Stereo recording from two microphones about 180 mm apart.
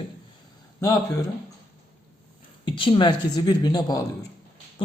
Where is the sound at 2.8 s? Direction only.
30° left (ahead or behind).